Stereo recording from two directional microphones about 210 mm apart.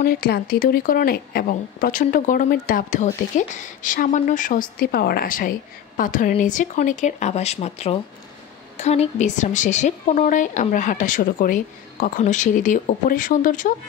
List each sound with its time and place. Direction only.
0.0 s speech: 45° left (ahead or behind)